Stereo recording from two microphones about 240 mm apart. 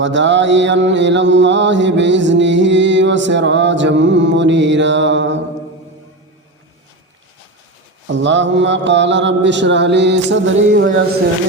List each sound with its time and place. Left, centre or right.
0.0 s mantra: right
8.0 s mantra: right